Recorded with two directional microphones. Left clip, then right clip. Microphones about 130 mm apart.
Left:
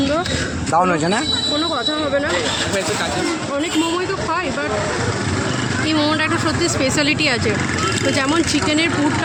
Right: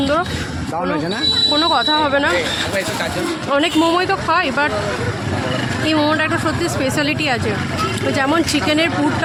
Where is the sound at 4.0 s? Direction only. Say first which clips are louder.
Right 5 dB; 45° right (ahead or behind).